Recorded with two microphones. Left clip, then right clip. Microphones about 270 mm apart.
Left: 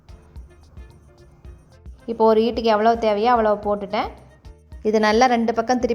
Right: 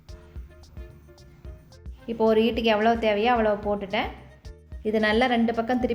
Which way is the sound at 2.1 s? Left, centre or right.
Centre.